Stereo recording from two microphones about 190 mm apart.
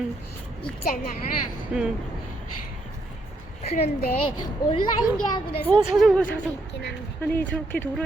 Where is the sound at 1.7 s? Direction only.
5° right (ahead or behind).